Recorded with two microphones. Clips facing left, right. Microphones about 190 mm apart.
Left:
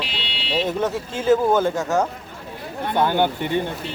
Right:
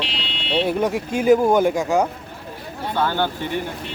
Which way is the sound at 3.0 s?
15° left (ahead or behind).